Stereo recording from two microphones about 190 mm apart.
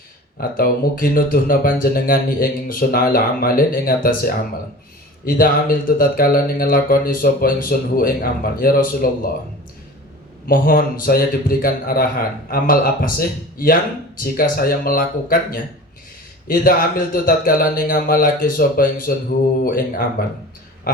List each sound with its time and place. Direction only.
0.3 s mantra: 50° left (ahead or behind)
5.2 s mantra: 50° left (ahead or behind)
10.4 s mantra: 50° left (ahead or behind)
20.9 s pig: 50° left (ahead or behind)